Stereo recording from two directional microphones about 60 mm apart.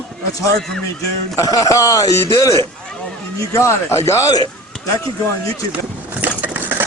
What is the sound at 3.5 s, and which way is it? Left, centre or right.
Speech, left.